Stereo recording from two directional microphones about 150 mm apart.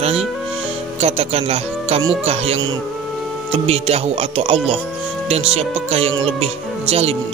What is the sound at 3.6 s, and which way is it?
Speech, 45° right (ahead or behind).